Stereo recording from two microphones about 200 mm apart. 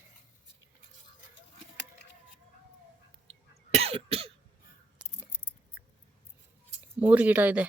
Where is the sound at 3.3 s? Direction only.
30° right (ahead or behind).